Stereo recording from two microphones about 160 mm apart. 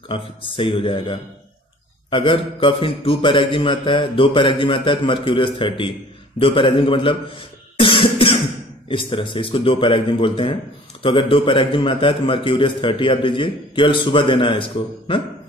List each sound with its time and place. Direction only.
0.1 s a man's voice: 30° left (ahead or behind)
7.8 s music: 35° left (ahead or behind)
8.8 s a man's voice: 30° left (ahead or behind)